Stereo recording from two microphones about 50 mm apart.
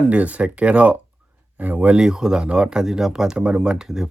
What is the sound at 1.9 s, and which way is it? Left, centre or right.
Speech, centre.